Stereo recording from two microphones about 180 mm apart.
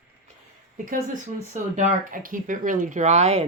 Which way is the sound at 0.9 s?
45° right (ahead or behind).